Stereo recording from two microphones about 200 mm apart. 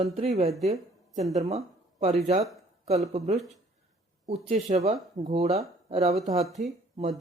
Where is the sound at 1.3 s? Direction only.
35° right (ahead or behind).